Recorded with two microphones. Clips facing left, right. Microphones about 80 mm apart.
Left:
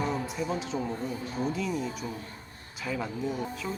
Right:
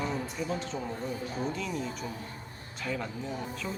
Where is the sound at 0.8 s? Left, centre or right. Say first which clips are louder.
Left 2 dB; centre.